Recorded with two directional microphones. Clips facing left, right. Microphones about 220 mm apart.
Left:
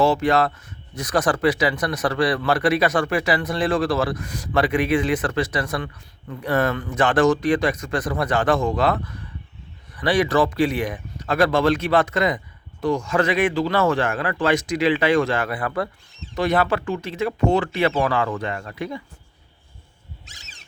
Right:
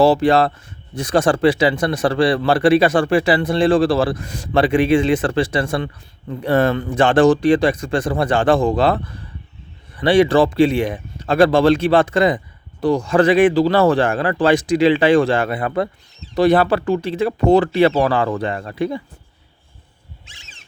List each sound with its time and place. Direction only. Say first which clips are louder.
0.0 s speech: right 5 dB; 35° right (ahead or behind)
20.2 s cat: right 1 dB; 40° left (ahead or behind)